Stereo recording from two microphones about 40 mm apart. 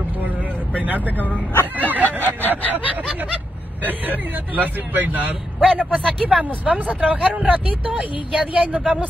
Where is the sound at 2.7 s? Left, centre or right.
Right.